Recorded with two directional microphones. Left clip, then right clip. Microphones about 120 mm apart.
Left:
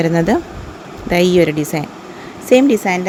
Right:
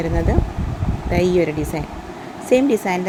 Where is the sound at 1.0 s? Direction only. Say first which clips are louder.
Left 5 dB; 70° left (ahead or behind).